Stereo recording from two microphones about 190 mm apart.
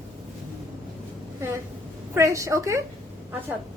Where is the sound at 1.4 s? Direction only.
15° right (ahead or behind).